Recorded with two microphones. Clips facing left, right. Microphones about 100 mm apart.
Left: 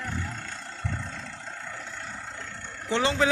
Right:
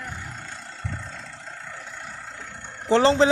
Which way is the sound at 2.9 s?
35° right (ahead or behind).